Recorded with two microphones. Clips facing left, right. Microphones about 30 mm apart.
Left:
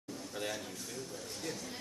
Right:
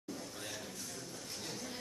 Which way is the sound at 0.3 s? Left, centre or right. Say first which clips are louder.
Left 7 dB; centre.